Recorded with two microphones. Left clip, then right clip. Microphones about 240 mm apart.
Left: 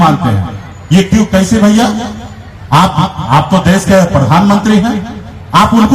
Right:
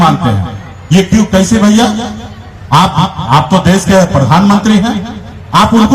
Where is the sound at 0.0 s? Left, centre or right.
Right.